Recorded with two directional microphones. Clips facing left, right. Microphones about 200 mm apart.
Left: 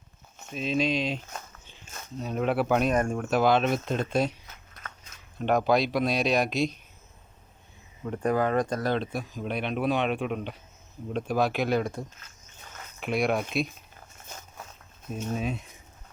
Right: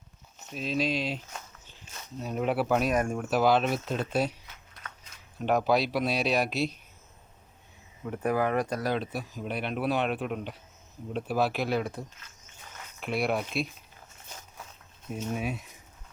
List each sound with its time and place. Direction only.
0.5 s speech: centre (ahead or behind)
5.4 s speech: 5° right (ahead or behind)
8.1 s speech: 10° right (ahead or behind)
12.6 s cricket: 40° left (ahead or behind)
13.0 s speech: 5° right (ahead or behind)
14.3 s walk: 45° left (ahead or behind)
15.1 s speech: 10° right (ahead or behind)